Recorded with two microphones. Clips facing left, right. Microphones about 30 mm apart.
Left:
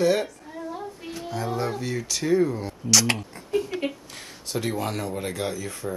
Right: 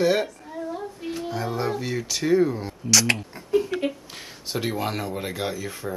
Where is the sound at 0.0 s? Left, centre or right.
Centre.